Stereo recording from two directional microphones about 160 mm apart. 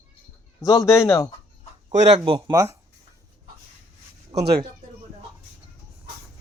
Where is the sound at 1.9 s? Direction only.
45° right (ahead or behind).